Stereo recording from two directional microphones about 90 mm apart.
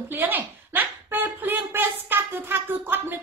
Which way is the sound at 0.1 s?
20° right (ahead or behind).